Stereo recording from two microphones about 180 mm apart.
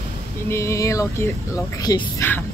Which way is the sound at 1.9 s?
20° left (ahead or behind).